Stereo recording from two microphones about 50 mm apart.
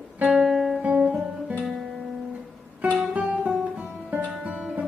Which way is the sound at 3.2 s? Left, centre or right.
Right.